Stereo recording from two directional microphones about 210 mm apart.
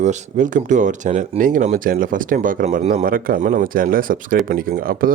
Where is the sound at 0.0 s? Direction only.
35° right (ahead or behind).